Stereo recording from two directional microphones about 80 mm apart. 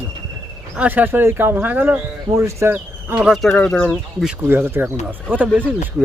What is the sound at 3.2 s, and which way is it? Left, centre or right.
Speech, centre.